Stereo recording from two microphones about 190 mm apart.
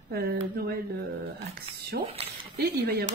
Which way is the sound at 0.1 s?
55° right (ahead or behind).